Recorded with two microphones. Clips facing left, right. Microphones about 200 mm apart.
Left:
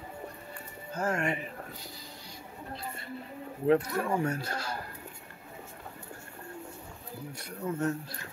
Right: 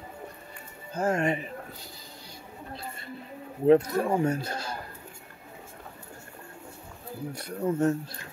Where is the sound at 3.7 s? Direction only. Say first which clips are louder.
Right 5 dB; 20° right (ahead or behind).